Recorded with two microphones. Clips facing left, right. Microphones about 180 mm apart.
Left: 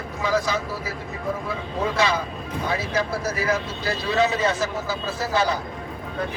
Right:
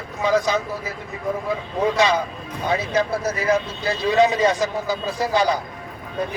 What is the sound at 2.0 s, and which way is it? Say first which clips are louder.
Speech: right 3 dB; 20° right (ahead or behind).